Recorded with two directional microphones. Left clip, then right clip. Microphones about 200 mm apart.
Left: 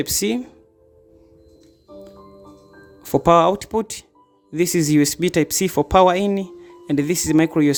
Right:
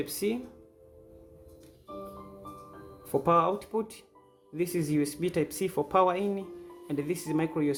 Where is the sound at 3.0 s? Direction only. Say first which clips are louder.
Left 11 dB; 55° left (ahead or behind).